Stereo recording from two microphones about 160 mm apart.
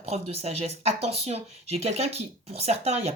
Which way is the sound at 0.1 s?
40° right (ahead or behind).